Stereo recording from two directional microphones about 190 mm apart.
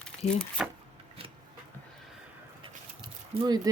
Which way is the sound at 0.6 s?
Centre (ahead or behind).